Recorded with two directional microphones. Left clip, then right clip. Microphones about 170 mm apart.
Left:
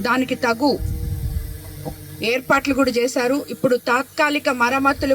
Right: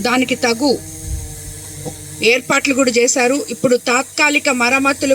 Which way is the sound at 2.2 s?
55° right (ahead or behind).